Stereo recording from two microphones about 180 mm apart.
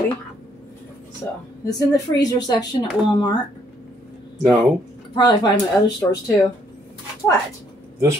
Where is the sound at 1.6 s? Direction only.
20° left (ahead or behind).